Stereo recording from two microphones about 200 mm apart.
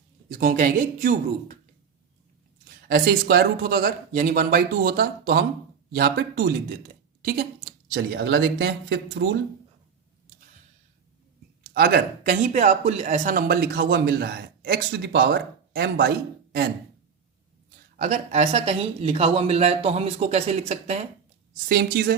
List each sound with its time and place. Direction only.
0.3 s speech: 45° right (ahead or behind)
2.8 s a woman's voice: 50° right (ahead or behind)
11.7 s speech: 50° right (ahead or behind)
17.9 s speech: 40° right (ahead or behind)
21.7 s speech: 50° right (ahead or behind)